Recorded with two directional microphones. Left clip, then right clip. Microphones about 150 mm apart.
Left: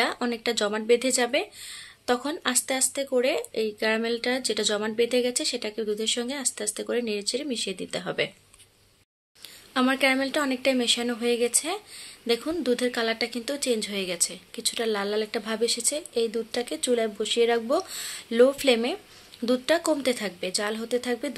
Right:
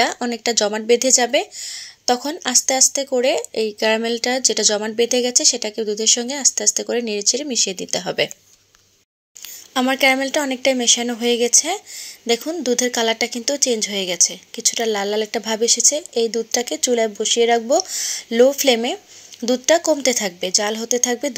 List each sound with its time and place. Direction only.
0.0 s speech: 30° right (ahead or behind)
9.8 s speech: 30° right (ahead or behind)